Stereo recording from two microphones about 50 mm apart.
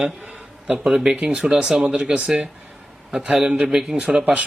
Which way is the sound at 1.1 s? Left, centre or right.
Right.